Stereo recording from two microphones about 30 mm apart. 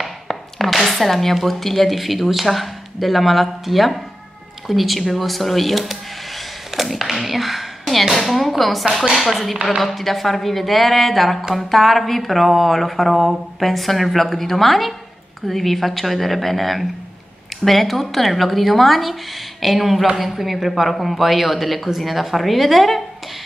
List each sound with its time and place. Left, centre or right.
0.0 s speech: centre
6.7 s a sound: centre
8.1 s speech: centre